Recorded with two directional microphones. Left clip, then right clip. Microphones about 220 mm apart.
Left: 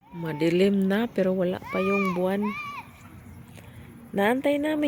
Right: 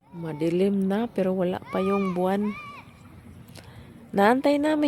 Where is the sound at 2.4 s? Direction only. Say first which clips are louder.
Left 2 dB; 45° left (ahead or behind).